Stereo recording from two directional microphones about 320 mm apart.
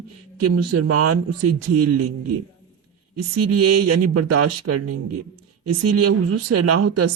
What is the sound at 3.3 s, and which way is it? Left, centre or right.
Speech, right.